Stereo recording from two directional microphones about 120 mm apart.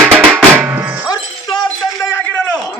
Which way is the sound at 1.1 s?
35° left (ahead or behind).